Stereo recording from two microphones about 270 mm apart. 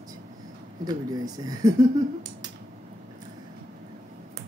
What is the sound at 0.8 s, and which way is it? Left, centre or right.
Speech, centre.